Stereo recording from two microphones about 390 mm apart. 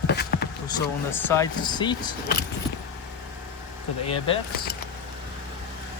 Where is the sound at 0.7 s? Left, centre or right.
Centre.